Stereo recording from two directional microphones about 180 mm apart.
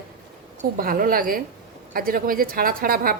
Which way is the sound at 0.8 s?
55° right (ahead or behind).